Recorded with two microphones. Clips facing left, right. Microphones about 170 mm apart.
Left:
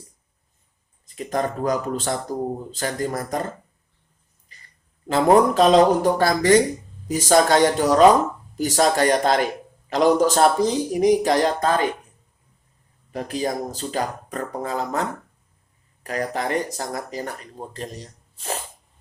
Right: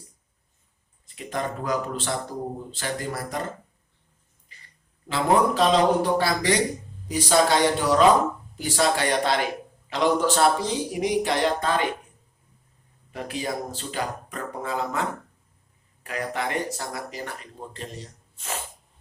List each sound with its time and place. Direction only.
1.0 s a man's voice: 40° left (ahead or behind)
5.0 s a man's voice: 45° left (ahead or behind)
13.1 s speech: 40° left (ahead or behind)
16.0 s speech: 40° left (ahead or behind)